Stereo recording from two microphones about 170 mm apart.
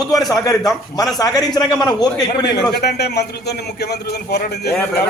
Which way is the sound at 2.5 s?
75° left (ahead or behind).